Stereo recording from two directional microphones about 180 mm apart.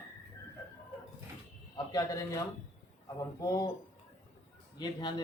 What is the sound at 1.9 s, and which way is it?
A man's voice, 20° left (ahead or behind).